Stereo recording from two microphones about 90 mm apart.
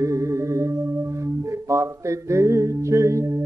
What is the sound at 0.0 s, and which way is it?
Music, 35° right (ahead or behind).